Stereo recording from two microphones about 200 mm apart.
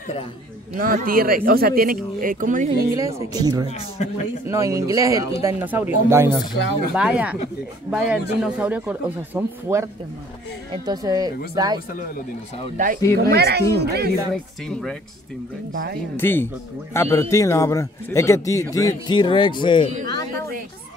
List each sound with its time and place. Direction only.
0.7 s speech: 45° right (ahead or behind)
3.1 s speech: 15° right (ahead or behind)
4.0 s a man's voice: 35° left (ahead or behind)
4.5 s speech: 15° right (ahead or behind)
12.7 s speech: 40° right (ahead or behind)
13.2 s speech: 55° right (ahead or behind)
14.7 s speech: 5° left (ahead or behind)
15.7 s speech: 45° right (ahead or behind)
16.2 s a man's voice: 10° left (ahead or behind)